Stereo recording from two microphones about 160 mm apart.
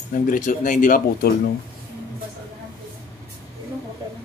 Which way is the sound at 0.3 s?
55° left (ahead or behind).